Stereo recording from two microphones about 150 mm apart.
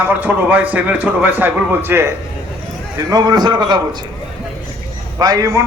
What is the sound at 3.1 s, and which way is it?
Speech, 25° right (ahead or behind).